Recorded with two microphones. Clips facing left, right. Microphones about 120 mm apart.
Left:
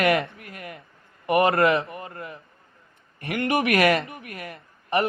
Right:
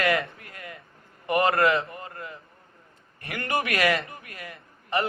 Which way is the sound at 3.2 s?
25° left (ahead or behind).